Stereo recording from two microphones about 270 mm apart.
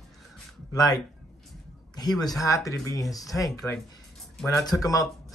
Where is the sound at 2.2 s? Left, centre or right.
Centre.